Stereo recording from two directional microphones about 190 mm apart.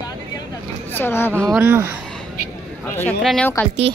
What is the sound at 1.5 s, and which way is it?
Speech, 10° right (ahead or behind).